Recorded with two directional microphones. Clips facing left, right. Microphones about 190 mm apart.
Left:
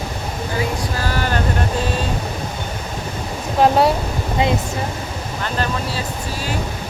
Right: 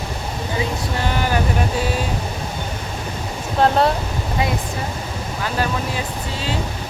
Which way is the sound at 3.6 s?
10° left (ahead or behind).